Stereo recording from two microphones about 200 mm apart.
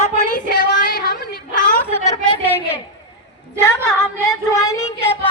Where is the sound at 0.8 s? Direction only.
45° left (ahead or behind).